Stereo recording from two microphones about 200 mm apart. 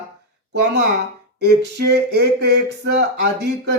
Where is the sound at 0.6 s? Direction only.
55° right (ahead or behind).